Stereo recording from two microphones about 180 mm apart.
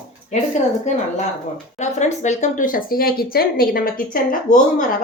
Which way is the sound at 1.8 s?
40° left (ahead or behind).